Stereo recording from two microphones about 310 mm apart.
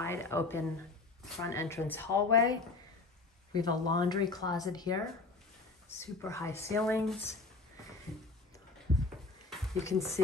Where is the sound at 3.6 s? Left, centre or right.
Centre.